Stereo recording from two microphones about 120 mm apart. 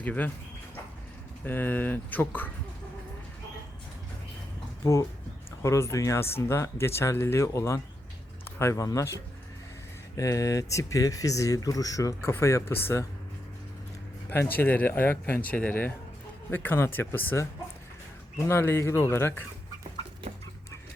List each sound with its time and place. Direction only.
0.0 s speech: 15° left (ahead or behind)
1.5 s speech: 15° left (ahead or behind)
5.6 s speech: 25° left (ahead or behind)
14.5 s speech: 15° left (ahead or behind)